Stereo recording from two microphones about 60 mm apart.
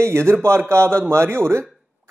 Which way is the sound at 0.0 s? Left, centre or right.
Right.